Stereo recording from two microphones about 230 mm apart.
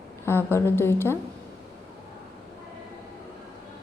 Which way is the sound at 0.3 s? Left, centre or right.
Centre.